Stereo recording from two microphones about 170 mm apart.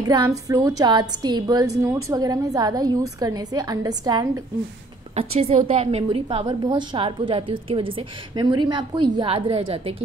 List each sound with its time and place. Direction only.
0.0 s a woman's voice: 20° right (ahead or behind)
5.1 s a woman's voice: 35° right (ahead or behind)